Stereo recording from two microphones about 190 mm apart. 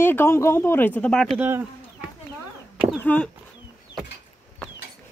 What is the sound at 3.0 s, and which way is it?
Speech, 10° left (ahead or behind).